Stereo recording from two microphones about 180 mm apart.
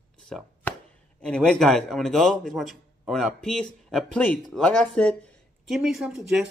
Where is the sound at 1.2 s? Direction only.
5° left (ahead or behind).